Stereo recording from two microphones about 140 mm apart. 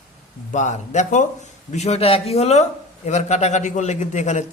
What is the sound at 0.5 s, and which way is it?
A man's voice, 60° left (ahead or behind).